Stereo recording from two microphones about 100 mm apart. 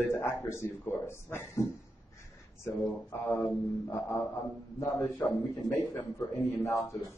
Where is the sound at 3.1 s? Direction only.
25° left (ahead or behind).